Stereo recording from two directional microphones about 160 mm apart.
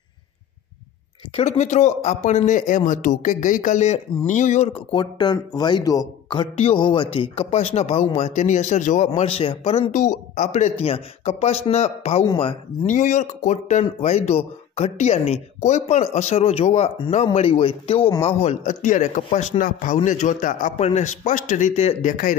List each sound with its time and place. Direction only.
1.3 s speech: 45° left (ahead or behind)
12.8 s speech: 50° left (ahead or behind)